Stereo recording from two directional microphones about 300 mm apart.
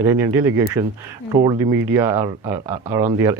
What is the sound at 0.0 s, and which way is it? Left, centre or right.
Speech, centre.